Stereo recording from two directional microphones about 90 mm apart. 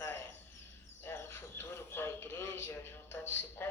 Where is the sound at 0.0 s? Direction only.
35° left (ahead or behind).